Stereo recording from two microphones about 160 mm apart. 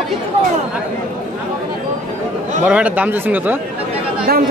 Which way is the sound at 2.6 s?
10° right (ahead or behind).